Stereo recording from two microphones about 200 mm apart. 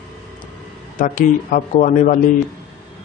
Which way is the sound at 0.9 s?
40° left (ahead or behind).